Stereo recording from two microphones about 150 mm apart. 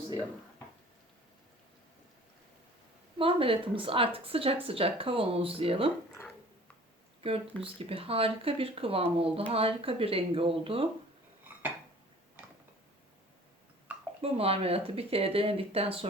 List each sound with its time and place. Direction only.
3.2 s speech: 35° right (ahead or behind)
7.6 s speech: 40° right (ahead or behind)
14.2 s speech: 40° right (ahead or behind)